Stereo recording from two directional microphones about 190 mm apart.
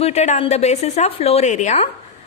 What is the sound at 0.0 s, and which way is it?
A woman's voice, 35° left (ahead or behind).